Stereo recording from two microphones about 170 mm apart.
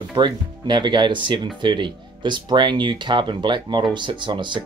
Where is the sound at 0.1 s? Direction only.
25° right (ahead or behind).